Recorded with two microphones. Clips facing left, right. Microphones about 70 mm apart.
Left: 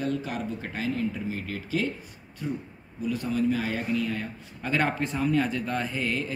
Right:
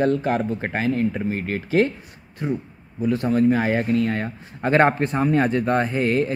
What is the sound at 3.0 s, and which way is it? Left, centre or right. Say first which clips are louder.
Speech: right 8 dB; right.